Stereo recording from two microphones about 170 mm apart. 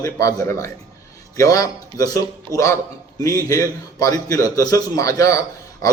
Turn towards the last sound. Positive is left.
turn(degrees=20)  # may be behind; listen again after turning